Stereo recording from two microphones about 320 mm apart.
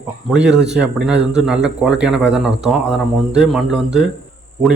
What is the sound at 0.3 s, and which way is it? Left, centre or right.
A man's voice, centre.